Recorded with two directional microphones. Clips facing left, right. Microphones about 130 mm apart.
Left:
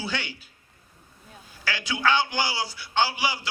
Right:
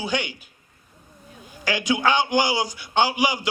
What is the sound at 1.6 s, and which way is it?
A man's voice, 15° right (ahead or behind).